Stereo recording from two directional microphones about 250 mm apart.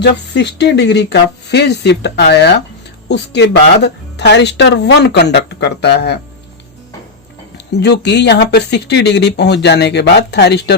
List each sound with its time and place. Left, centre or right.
0.0 s speech: left
7.7 s speech: left